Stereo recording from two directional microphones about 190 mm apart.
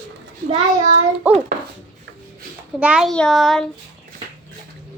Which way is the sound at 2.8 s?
5° right (ahead or behind).